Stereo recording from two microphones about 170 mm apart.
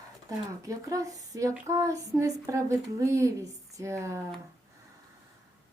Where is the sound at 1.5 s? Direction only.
15° right (ahead or behind).